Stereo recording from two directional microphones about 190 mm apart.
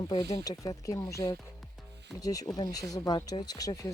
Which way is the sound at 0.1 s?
20° left (ahead or behind).